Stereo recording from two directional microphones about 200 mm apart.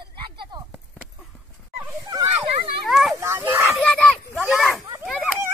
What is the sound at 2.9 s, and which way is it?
Children playing, centre (ahead or behind).